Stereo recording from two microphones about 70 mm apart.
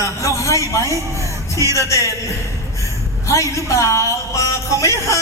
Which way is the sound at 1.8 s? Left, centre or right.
Left.